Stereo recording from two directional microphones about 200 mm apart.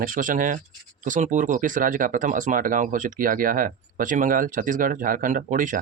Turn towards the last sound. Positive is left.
turn(degrees=-40)  # may be behind; listen again after turning